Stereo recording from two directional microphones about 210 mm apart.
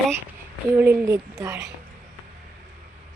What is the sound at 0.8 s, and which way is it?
Speech, 10° right (ahead or behind).